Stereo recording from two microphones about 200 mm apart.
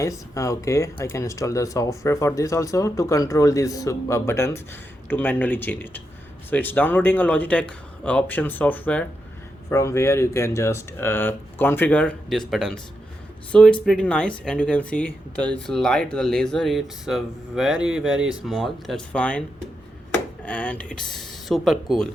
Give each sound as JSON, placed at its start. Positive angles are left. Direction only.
{"t": 0.0, "sound": "speech", "side_deg": 15}
{"t": 20.4, "sound": "speech", "side_deg": 5}